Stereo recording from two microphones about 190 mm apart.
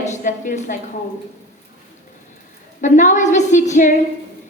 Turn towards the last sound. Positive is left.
turn(degrees=40)  # may be behind; listen again after turning